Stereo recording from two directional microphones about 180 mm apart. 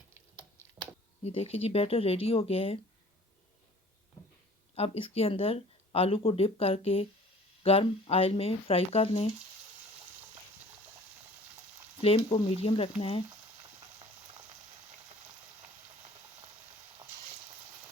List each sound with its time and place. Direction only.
1.2 s speech: 35° left (ahead or behind)
4.7 s speech: 35° left (ahead or behind)
12.0 s speech: 35° left (ahead or behind)
13.6 s frying: 25° right (ahead or behind)